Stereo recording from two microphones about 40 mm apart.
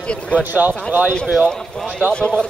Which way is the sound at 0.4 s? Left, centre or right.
Right.